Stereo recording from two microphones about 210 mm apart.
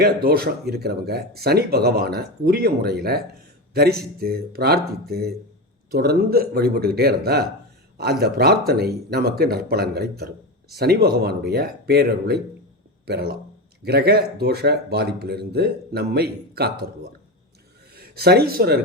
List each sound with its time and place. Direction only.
0.0 s speech: 45° right (ahead or behind)